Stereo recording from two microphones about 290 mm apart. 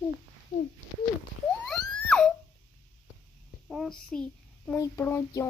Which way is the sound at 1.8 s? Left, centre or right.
Centre.